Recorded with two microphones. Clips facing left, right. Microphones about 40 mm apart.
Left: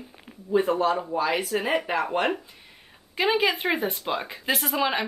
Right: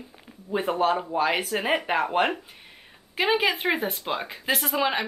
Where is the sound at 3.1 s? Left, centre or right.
Centre.